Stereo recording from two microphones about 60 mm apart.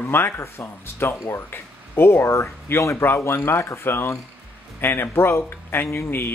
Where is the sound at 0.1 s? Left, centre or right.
Left.